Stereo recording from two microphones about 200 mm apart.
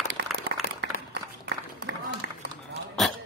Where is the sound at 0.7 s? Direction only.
55° right (ahead or behind).